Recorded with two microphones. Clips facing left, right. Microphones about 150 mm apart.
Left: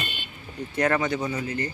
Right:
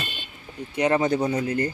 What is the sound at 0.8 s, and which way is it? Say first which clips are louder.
Speech: right 2 dB; 20° right (ahead or behind).